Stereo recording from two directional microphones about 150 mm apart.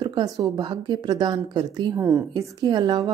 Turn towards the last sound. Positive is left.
turn(degrees=-30)  # may be behind; listen again after turning